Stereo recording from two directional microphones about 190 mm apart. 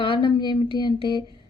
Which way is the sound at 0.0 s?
25° left (ahead or behind).